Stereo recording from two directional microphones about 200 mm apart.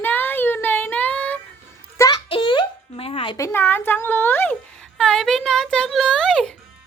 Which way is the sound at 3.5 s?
10° left (ahead or behind).